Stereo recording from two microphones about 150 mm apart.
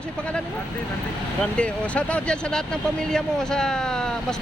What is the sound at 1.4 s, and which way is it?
Speech, 5° left (ahead or behind).